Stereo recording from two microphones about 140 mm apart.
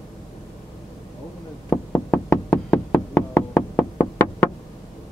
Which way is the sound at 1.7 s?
15° left (ahead or behind).